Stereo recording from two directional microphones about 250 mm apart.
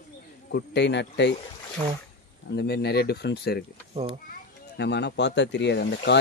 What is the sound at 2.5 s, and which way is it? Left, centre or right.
Speech, left.